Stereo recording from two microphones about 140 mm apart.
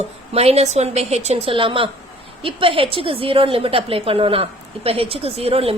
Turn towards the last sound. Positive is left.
turn(degrees=-45)  # may be behind; listen again after turning